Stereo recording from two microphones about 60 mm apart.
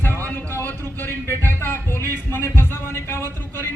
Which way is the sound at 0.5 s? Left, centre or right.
Left.